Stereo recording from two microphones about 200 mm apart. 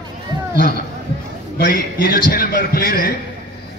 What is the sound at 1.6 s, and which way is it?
A man's voice, 50° left (ahead or behind).